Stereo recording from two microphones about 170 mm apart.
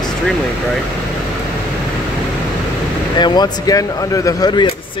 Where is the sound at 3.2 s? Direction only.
25° left (ahead or behind).